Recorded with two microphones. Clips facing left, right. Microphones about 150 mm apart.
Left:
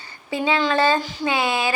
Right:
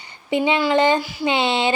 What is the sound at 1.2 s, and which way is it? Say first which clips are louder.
Speech: right 3 dB; 25° right (ahead or behind).